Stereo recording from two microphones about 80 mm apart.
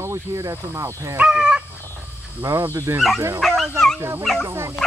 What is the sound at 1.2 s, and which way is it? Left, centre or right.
Speech, centre.